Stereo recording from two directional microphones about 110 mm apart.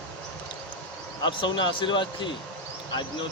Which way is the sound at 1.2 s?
45° left (ahead or behind).